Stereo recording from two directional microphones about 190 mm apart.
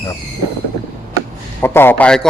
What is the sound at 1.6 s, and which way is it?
Speech, 10° left (ahead or behind).